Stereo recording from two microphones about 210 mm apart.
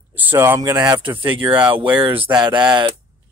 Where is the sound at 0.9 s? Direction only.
25° right (ahead or behind).